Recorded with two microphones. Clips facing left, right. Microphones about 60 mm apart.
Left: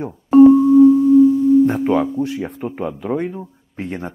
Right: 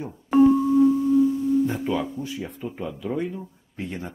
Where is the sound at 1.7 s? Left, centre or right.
Left.